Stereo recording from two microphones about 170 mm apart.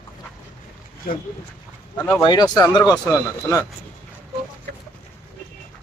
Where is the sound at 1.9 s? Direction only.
10° left (ahead or behind).